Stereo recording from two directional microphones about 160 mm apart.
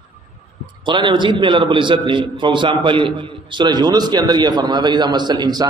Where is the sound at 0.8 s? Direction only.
30° right (ahead or behind).